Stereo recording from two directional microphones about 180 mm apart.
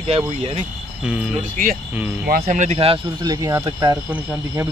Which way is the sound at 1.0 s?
5° right (ahead or behind).